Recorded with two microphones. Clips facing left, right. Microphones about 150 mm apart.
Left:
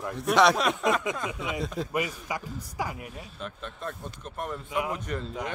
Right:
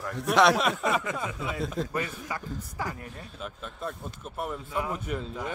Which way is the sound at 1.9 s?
15° left (ahead or behind).